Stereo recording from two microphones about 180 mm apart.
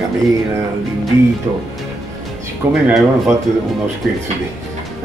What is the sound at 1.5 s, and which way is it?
Speech, 20° right (ahead or behind).